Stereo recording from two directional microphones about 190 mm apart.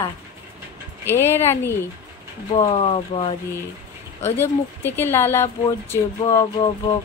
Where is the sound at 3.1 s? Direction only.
25° left (ahead or behind).